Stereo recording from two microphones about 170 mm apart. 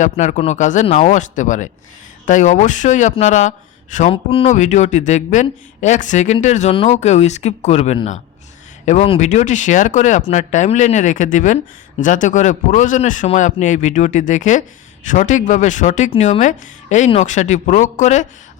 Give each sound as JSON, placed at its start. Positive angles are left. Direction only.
{"t": 0.0, "sound": "speech", "side_deg": 45}
{"t": 4.1, "sound": "speech", "side_deg": 30}
{"t": 4.5, "sound": "speech", "side_deg": 45}